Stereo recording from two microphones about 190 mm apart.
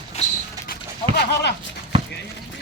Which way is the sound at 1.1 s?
60° left (ahead or behind).